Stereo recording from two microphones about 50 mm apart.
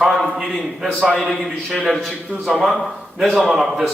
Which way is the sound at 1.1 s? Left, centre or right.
Centre.